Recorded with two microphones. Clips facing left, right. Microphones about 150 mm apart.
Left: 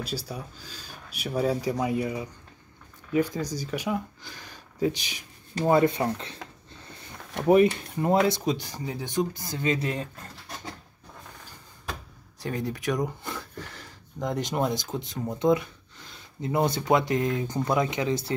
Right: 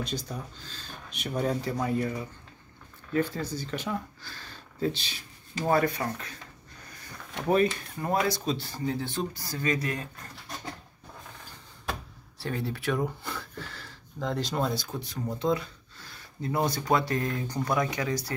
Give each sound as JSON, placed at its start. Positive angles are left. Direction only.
{"t": 0.3, "sound": "speech", "side_deg": 10}
{"t": 6.7, "sound": "a sound", "side_deg": 25}
{"t": 7.9, "sound": "speech", "side_deg": 20}
{"t": 12.4, "sound": "speech", "side_deg": 15}